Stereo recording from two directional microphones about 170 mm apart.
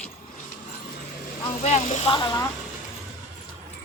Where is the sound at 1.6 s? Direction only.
40° left (ahead or behind).